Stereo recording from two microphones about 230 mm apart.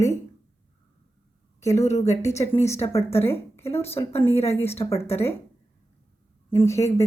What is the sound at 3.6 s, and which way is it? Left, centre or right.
Speech, left.